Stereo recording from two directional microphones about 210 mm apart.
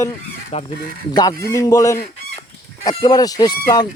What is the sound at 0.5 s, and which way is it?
Speech, 30° left (ahead or behind).